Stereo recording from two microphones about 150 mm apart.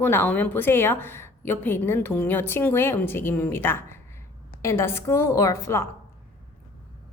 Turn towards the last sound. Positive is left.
turn(degrees=20)  # may be behind; listen again after turning